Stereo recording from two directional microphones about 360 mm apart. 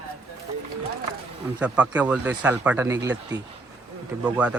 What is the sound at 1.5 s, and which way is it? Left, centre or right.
Speech, centre.